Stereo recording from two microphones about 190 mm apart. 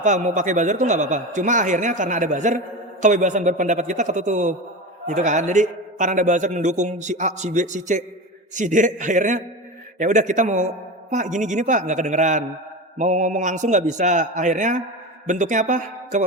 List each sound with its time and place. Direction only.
0.0 s a man's voice: 40° right (ahead or behind)